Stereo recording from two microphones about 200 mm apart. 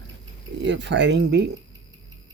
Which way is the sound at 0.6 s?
60° right (ahead or behind).